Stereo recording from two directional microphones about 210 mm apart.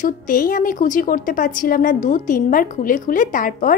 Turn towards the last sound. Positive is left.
turn(degrees=40)  # may be behind; listen again after turning